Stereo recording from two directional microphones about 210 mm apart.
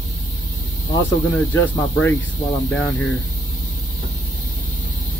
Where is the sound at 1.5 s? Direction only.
10° left (ahead or behind).